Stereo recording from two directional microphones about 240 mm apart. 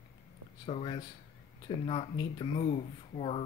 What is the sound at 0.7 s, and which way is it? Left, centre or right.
Speech, left.